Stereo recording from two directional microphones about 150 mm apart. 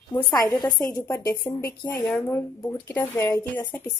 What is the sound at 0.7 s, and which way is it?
A woman's voice, 25° left (ahead or behind).